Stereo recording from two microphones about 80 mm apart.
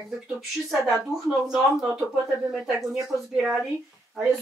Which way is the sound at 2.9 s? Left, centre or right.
Centre.